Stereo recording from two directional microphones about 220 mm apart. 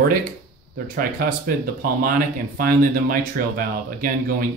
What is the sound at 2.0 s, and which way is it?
Speech, 40° right (ahead or behind).